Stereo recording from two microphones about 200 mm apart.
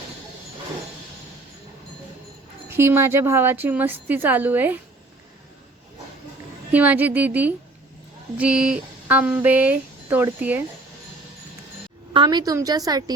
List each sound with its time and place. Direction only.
2.6 s speech: 10° right (ahead or behind)
6.7 s speech: 10° right (ahead or behind)
12.1 s a woman's voice: 20° right (ahead or behind)